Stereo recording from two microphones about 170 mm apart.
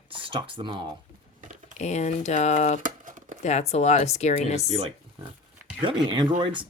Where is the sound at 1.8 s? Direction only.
40° left (ahead or behind).